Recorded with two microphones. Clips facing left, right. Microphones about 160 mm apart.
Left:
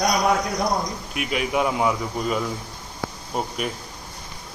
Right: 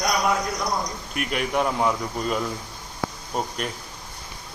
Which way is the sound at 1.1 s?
5° left (ahead or behind).